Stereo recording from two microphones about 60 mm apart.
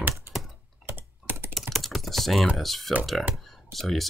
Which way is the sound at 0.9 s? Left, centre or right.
Right.